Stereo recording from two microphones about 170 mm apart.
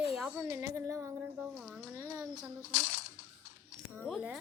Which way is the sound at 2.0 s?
20° right (ahead or behind).